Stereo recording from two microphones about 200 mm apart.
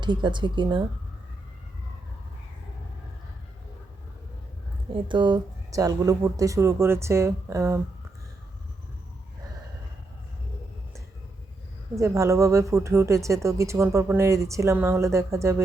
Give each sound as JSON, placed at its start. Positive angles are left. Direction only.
{"t": 0.0, "sound": "speech", "side_deg": -25}
{"t": 4.9, "sound": "speech", "side_deg": -25}
{"t": 11.9, "sound": "speech", "side_deg": -15}